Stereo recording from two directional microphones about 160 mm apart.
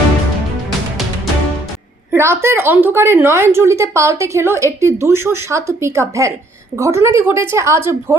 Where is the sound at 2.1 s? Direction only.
15° right (ahead or behind).